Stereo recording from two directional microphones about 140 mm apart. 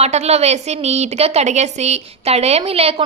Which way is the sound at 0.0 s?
50° right (ahead or behind).